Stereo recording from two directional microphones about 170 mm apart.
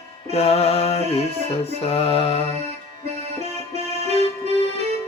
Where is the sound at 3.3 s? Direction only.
40° right (ahead or behind).